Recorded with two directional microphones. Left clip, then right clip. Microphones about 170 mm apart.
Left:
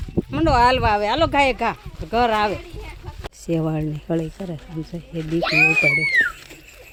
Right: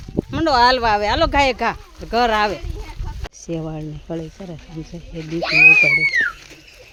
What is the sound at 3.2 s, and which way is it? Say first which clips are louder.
Speech: left 4 dB; 10° left (ahead or behind).